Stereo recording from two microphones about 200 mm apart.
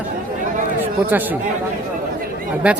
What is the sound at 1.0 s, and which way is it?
Speech, 10° right (ahead or behind).